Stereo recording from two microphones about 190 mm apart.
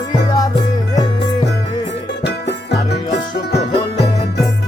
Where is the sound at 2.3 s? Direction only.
60° left (ahead or behind).